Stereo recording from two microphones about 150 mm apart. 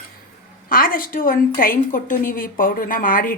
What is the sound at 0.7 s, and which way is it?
A woman's voice, 70° left (ahead or behind).